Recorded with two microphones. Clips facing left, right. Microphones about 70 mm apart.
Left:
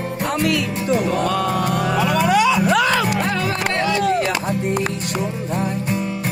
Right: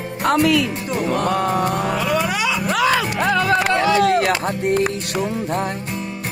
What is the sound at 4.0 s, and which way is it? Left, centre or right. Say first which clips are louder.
Music: right 3 dB; right.